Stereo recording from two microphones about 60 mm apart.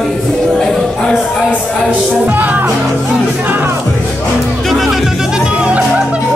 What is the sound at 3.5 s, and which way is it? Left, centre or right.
Speech, right.